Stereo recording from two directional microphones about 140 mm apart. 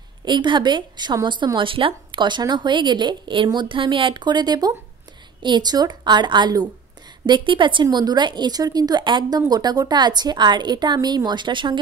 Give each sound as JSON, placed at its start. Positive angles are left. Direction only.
{"t": 0.2, "sound": "a woman's voice", "side_deg": -35}